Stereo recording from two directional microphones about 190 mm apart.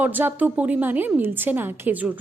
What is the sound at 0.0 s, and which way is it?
A woman's voice, 10° right (ahead or behind).